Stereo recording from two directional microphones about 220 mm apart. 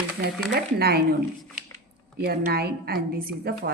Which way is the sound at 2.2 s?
45° right (ahead or behind).